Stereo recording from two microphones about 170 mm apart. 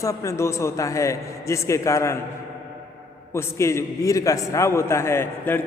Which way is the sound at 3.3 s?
15° left (ahead or behind).